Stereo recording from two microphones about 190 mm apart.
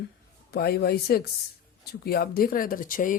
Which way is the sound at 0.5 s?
55° left (ahead or behind).